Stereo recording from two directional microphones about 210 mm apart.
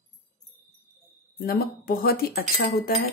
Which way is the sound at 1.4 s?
45° left (ahead or behind).